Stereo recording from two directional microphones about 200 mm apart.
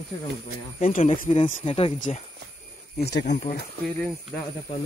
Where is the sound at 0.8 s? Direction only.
35° left (ahead or behind).